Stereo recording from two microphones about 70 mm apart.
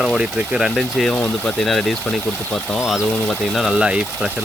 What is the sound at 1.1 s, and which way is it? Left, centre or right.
Speech, centre.